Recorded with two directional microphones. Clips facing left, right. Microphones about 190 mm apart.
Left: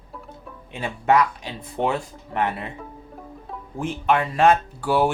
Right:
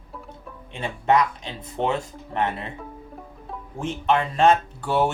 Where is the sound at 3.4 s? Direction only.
10° left (ahead or behind).